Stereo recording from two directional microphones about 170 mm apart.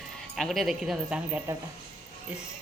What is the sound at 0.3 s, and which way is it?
Speech, centre (ahead or behind).